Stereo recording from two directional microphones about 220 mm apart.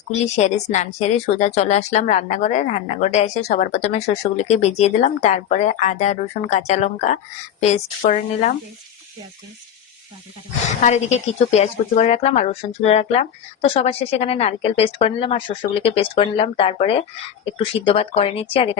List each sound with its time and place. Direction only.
0.2 s speech: 30° left (ahead or behind)
10.8 s a woman's voice: 30° left (ahead or behind)